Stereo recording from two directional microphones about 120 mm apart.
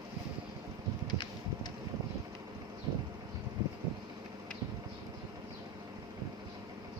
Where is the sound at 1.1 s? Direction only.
35° left (ahead or behind).